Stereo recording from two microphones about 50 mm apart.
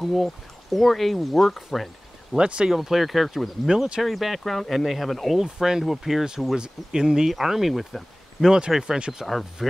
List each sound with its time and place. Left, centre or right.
0.0 s speech: centre
2.3 s speech: centre
2.7 s speech: centre
3.6 s speech: centre
9.2 s speech: centre